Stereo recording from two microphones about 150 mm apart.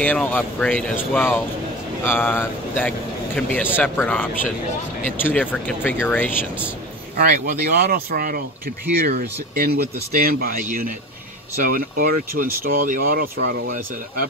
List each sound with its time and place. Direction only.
0.0 s speech: 10° left (ahead or behind)
7.2 s speech: 80° right
9.6 s speech: 85° right